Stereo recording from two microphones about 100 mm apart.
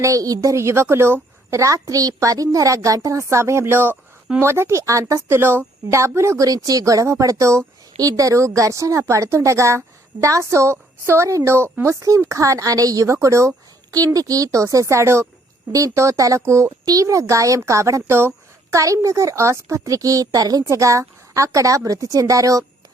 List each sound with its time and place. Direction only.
0.0 s a child's voice: 35° right (ahead or behind)